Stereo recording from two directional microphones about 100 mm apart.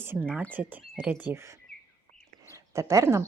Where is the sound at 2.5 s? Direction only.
30° right (ahead or behind).